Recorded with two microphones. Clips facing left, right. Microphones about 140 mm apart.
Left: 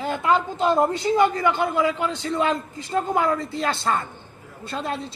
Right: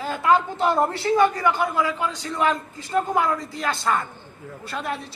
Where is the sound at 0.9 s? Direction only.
20° left (ahead or behind).